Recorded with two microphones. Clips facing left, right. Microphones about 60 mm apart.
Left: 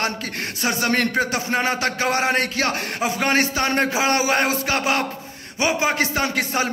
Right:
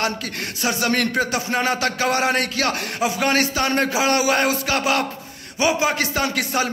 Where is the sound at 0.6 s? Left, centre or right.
Left.